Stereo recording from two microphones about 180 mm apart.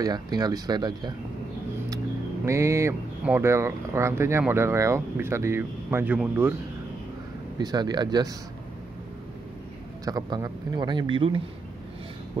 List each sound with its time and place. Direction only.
0.0 s speech: 20° right (ahead or behind)
2.4 s speech: 15° right (ahead or behind)
7.5 s speech: 25° right (ahead or behind)
10.0 s speech: 20° right (ahead or behind)